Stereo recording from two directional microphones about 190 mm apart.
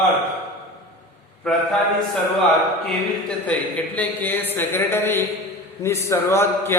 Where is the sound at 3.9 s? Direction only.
10° left (ahead or behind).